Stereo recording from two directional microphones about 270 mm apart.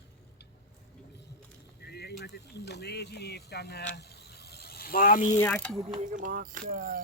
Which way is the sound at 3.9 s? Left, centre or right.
Left.